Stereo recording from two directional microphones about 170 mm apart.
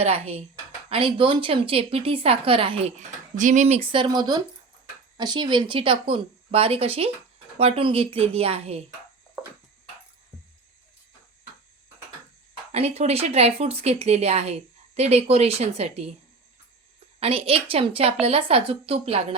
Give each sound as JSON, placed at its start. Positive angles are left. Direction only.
{"t": 0.0, "sound": "speech", "side_deg": -35}
{"t": 3.3, "sound": "speech", "side_deg": -45}
{"t": 12.7, "sound": "speech", "side_deg": -40}
{"t": 17.2, "sound": "speech", "side_deg": -35}